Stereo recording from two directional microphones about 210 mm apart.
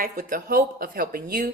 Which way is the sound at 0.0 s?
40° right (ahead or behind).